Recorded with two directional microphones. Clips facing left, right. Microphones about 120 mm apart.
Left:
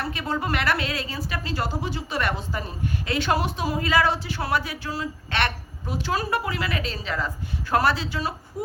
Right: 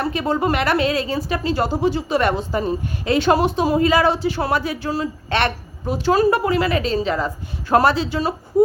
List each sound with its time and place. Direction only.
0.0 s a woman's voice: 25° right (ahead or behind)